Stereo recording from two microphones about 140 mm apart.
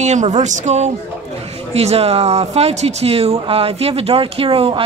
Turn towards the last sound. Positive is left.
turn(degrees=-40)  # may be behind; listen again after turning